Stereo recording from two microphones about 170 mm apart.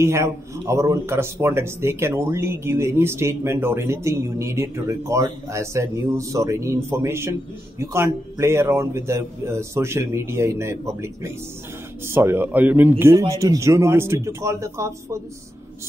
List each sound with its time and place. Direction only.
0.0 s a man's voice: 15° right (ahead or behind)
12.1 s a man's voice: 15° right (ahead or behind)